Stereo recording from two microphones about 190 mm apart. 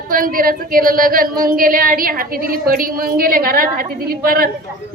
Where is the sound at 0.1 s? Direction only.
45° right (ahead or behind).